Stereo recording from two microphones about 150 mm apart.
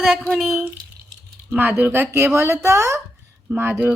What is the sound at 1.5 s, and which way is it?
Speech, 10° right (ahead or behind).